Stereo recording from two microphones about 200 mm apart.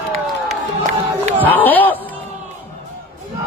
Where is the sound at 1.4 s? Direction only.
10° left (ahead or behind).